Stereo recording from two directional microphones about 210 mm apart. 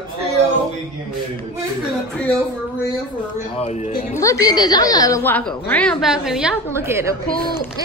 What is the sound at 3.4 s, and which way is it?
Speech, 30° left (ahead or behind).